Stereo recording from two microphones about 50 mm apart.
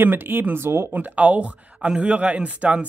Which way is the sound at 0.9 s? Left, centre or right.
Right.